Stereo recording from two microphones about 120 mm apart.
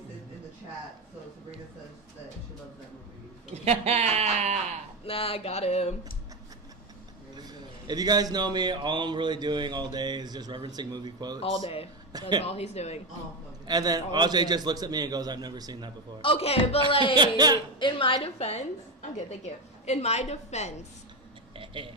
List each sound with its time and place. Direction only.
3.5 s a man's voice: 65° right (ahead or behind)
5.0 s a sound: 50° left (ahead or behind)
7.9 s a man's voice: 35° right (ahead or behind)
12.4 s a sound: 60° left (ahead or behind)
13.7 s a man's voice: 35° right (ahead or behind)
16.2 s a woman's voice: 55° left (ahead or behind)
17.2 s a man's voice: 35° right (ahead or behind)
17.7 s a woman's voice: 45° left (ahead or behind); by 18.6 s 60° left (ahead or behind)
19.1 s a woman's voice: 70° left (ahead or behind)
21.5 s a sound: 45° right (ahead or behind)